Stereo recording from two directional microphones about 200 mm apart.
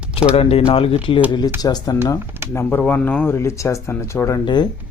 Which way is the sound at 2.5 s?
10° left (ahead or behind).